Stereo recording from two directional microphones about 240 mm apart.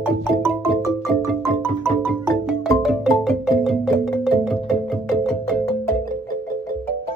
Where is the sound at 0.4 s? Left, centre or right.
Centre.